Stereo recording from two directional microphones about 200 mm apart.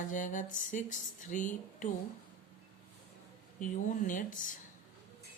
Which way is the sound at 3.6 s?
40° left (ahead or behind).